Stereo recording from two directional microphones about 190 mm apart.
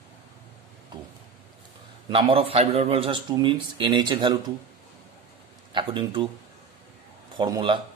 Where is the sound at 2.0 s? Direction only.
30° right (ahead or behind).